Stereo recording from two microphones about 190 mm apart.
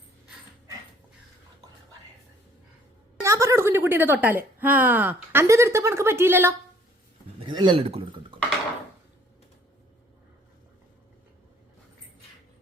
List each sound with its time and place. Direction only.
3.2 s a woman's voice: 15° right (ahead or behind)
7.3 s speech: 25° right (ahead or behind)